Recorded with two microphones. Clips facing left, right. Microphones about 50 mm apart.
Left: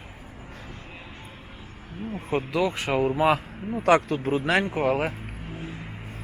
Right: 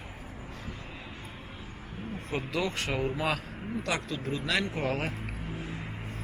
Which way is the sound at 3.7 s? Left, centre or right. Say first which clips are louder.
Left 12 dB; left.